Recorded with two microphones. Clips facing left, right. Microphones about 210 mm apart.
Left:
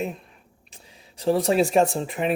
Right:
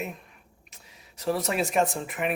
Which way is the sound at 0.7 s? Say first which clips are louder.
Left 5 dB; 30° left (ahead or behind).